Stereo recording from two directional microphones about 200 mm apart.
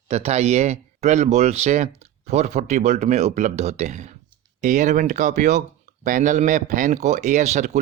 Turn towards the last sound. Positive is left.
turn(degrees=-35)  # may be behind; listen again after turning